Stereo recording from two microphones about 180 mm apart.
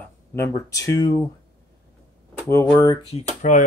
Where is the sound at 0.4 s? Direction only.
15° left (ahead or behind).